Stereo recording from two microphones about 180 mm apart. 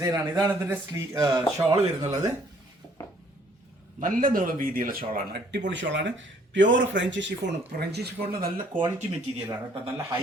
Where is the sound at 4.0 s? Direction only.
50° right (ahead or behind).